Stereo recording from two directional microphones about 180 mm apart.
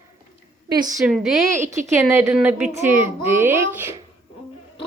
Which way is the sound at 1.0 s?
Centre (ahead or behind).